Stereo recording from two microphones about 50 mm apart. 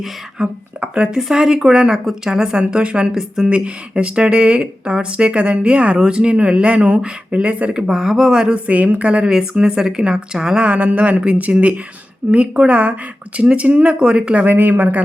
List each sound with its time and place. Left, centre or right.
0.3 s a woman's voice: centre
10.7 s speech: right
14.4 s speech: right